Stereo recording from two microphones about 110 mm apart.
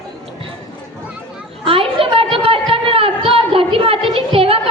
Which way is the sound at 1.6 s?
55° right (ahead or behind).